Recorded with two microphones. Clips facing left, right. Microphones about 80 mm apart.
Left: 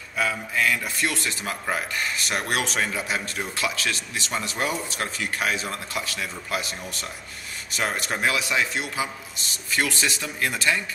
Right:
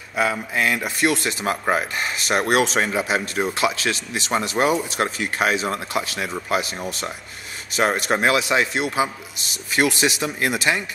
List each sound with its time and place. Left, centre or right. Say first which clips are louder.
0.1 s a man's voice: right 4 dB; right